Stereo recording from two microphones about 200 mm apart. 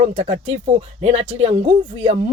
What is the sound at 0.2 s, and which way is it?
Speech, 30° right (ahead or behind).